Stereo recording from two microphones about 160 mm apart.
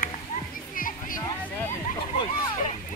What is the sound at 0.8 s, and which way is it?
Music, 60° left (ahead or behind).